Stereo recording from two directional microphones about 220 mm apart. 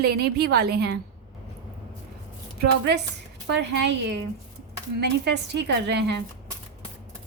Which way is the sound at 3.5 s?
50° right (ahead or behind).